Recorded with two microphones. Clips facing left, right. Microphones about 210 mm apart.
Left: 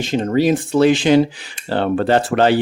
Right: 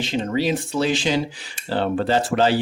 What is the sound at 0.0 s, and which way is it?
Speech, 45° left (ahead or behind).